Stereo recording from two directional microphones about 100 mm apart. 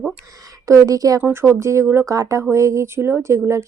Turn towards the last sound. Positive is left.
turn(degrees=-30)  # may be behind; listen again after turning